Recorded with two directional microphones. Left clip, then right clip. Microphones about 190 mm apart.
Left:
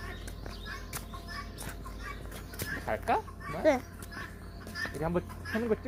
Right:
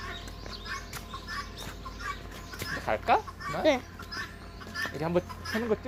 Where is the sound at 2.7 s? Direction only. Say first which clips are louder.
Right 4 dB; 15° right (ahead or behind).